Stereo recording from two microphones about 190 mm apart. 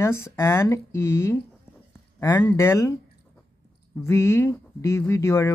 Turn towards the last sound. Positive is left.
turn(degrees=15)  # may be behind; listen again after turning